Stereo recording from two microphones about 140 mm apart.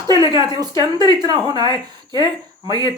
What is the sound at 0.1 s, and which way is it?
Speech, 25° right (ahead or behind).